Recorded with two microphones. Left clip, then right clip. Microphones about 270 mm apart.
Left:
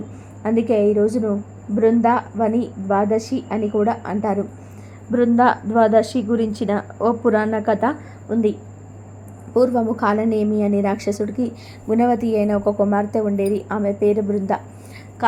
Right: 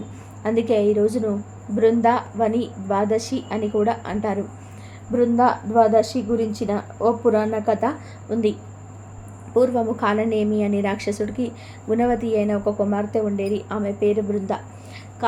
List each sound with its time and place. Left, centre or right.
0.4 s a woman's voice: centre
9.6 s a woman's voice: centre